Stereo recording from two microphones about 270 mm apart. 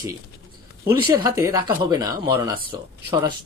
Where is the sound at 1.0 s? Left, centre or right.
Centre.